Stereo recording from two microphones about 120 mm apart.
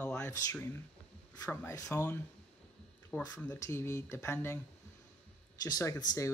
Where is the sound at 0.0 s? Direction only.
15° left (ahead or behind).